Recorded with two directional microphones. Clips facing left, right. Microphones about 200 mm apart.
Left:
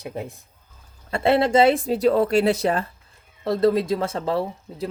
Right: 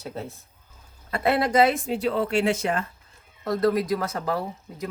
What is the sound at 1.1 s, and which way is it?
Speech, 25° left (ahead or behind).